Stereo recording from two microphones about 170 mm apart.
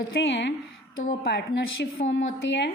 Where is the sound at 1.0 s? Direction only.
70° left (ahead or behind); by 2.7 s 90° left.